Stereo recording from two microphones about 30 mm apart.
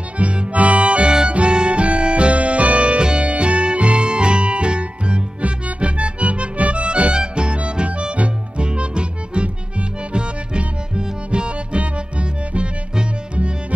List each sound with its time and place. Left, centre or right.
0.2 s music: right
3.0 s music: right
11.0 s music: right